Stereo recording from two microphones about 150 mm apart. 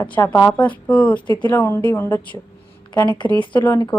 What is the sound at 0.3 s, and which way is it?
A woman's voice, 15° left (ahead or behind).